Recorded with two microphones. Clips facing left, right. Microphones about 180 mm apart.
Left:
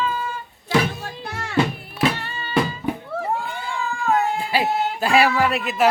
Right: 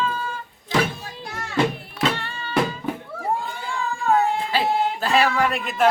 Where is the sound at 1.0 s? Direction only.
65° left (ahead or behind).